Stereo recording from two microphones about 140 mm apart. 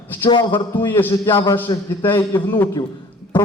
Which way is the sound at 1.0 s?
15° left (ahead or behind).